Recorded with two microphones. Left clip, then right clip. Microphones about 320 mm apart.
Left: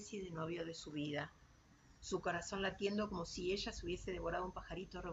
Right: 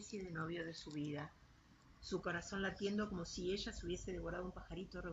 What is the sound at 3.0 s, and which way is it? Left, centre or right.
Speech, left.